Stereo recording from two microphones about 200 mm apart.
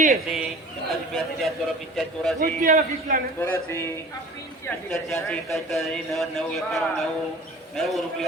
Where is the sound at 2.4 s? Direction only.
45° right (ahead or behind).